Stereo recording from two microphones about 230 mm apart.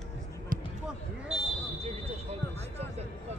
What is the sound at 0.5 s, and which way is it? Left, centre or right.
Basketball bounce, right.